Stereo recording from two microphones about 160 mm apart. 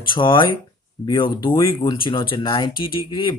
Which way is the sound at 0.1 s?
30° left (ahead or behind).